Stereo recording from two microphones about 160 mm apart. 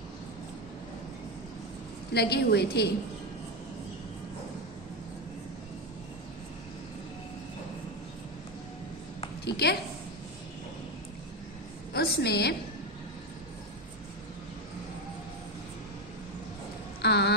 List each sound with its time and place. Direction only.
2.1 s a woman's voice: 90° left
9.4 s a woman's voice: 90° left
11.9 s a woman's voice: 85° left
17.0 s rain: 90° left